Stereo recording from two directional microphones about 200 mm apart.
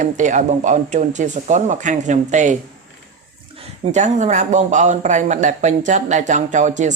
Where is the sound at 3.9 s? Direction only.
35° right (ahead or behind).